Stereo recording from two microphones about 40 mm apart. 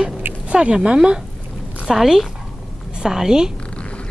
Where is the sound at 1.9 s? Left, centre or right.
Centre.